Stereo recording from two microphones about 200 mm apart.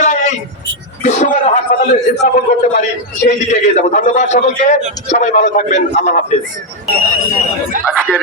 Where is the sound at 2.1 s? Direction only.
50° left (ahead or behind).